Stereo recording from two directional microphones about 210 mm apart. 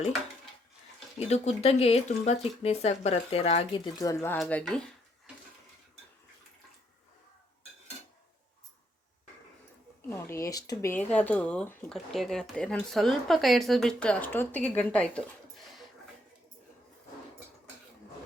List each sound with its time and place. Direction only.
1.2 s speech: 30° left (ahead or behind)
3.9 s speech: 15° left (ahead or behind)
10.1 s speech: 15° left (ahead or behind)